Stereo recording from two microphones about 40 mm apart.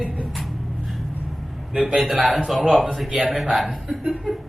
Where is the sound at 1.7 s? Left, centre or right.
Centre.